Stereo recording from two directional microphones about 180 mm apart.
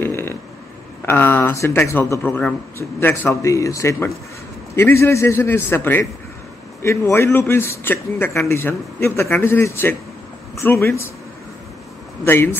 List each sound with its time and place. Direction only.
0.0 s a sound: 10° left (ahead or behind)
1.0 s a man's voice: 10° left (ahead or behind)
12.3 s a man's voice: 10° left (ahead or behind)